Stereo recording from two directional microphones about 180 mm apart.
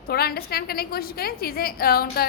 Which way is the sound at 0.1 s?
60° left (ahead or behind).